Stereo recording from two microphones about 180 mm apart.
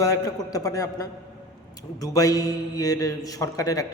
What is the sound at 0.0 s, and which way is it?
A man's voice, 20° left (ahead or behind).